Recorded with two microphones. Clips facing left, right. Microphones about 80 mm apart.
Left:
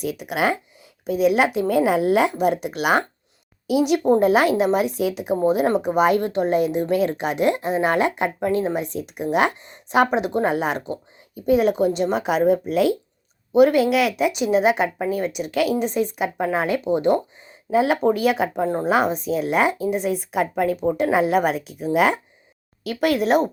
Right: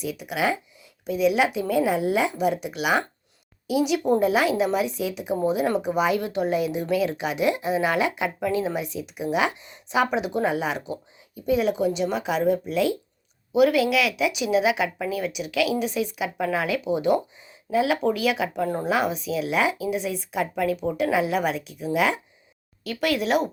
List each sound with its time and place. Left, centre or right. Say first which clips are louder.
0.0 s speech: left 3 dB; left
13.5 s speech: left 4 dB; left
18.6 s a woman's voice: left 2 dB; left
18.9 s speech: left 6 dB; left
20.8 s speech: left 6 dB; left